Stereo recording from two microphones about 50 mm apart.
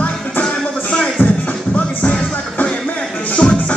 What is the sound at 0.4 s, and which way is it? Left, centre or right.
Music, centre.